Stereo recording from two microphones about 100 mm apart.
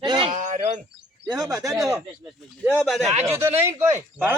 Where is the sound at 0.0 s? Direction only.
50° right (ahead or behind).